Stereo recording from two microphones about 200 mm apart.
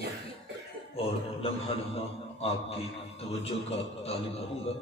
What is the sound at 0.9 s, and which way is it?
A man's voice, 30° left (ahead or behind).